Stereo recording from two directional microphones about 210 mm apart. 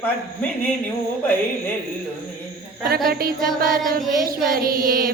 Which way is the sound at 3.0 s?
45° right (ahead or behind).